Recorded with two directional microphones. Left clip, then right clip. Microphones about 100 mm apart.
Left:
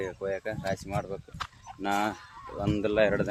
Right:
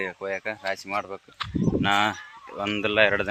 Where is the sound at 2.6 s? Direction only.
10° left (ahead or behind).